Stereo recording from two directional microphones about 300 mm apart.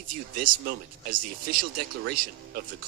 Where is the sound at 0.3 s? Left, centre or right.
Right.